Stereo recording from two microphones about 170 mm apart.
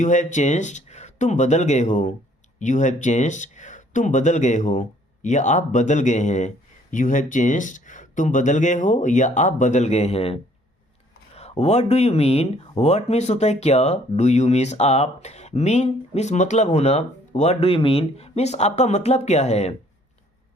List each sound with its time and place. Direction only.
0.0 s speech: 45° left (ahead or behind)